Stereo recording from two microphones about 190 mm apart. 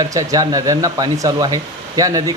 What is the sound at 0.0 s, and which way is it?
Speech, 15° right (ahead or behind).